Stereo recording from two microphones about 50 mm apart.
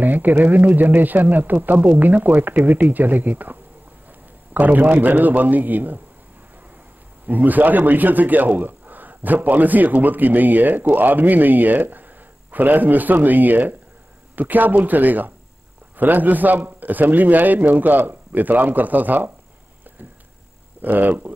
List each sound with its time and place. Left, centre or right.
0.0 s a man's voice: right
4.6 s a man's voice: right
7.2 s a man's voice: right
20.8 s a man's voice: right